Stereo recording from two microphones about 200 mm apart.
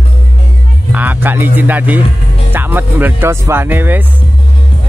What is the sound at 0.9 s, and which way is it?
Speech, 10° right (ahead or behind).